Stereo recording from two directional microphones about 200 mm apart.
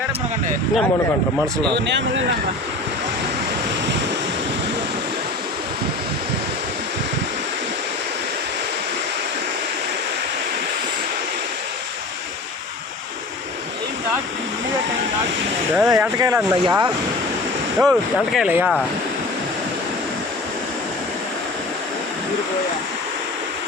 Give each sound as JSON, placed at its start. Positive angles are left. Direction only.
{"t": 1.7, "sound": "speech", "side_deg": -60}
{"t": 15.9, "sound": "speech", "side_deg": -15}
{"t": 17.7, "sound": "speech", "side_deg": 0}